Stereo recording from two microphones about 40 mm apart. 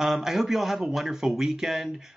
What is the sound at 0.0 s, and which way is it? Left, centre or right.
Speech, centre.